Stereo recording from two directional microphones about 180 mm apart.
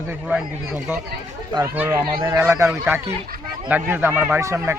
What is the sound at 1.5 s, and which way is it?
Speech, 15° right (ahead or behind).